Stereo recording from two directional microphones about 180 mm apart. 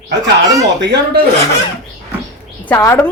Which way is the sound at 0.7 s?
70° right (ahead or behind).